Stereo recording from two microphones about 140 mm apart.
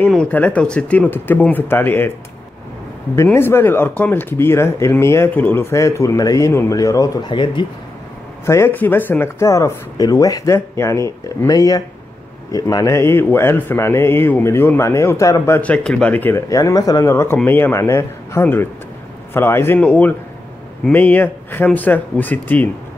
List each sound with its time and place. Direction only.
0.1 s speech: 10° left (ahead or behind)
3.3 s speech: 15° left (ahead or behind); by 7.6 s 35° left (ahead or behind)
8.5 s speech: 15° left (ahead or behind)